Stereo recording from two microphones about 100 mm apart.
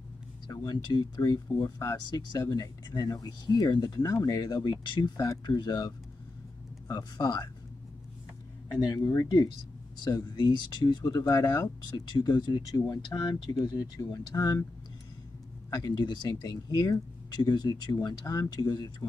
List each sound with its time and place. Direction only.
0.5 s speech: 45° left (ahead or behind)
4.6 s speech: 50° left (ahead or behind)
8.8 s speech: 35° left (ahead or behind)
15.7 s speech: 40° left (ahead or behind)